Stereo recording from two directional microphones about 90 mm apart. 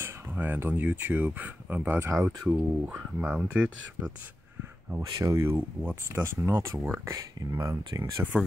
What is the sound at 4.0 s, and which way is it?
Speech, 40° right (ahead or behind).